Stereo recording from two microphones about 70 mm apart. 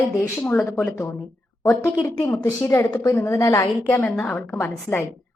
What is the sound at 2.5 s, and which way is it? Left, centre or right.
A woman's voice, left.